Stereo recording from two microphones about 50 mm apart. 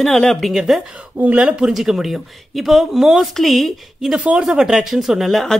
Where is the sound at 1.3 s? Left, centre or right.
Centre.